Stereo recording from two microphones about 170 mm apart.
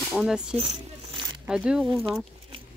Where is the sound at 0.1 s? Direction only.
5° right (ahead or behind).